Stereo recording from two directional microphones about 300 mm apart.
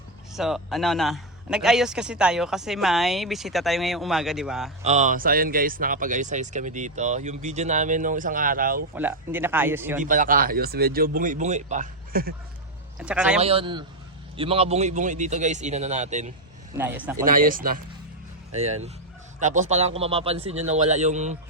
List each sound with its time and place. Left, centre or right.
0.3 s a man's voice: centre
4.8 s speech: right
9.0 s speech: centre
10.0 s speech: right
13.0 s a man's voice: centre
13.4 s speech: centre
16.7 s speech: centre
17.2 s speech: right